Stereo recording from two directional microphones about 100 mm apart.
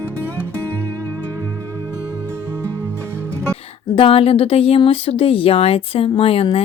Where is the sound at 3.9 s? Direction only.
70° left (ahead or behind).